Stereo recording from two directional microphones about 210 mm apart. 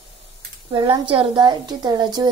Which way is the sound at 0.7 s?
20° right (ahead or behind).